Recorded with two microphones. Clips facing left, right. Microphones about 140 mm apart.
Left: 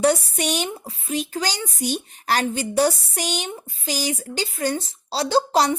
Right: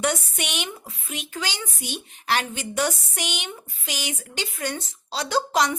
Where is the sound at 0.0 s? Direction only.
35° left (ahead or behind).